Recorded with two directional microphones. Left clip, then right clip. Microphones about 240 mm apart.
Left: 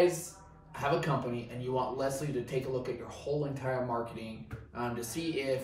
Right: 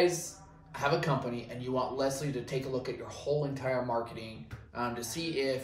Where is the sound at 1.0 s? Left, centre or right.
Centre.